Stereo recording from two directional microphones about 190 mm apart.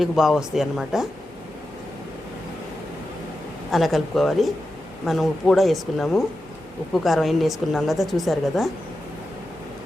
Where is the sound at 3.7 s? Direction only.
Centre (ahead or behind).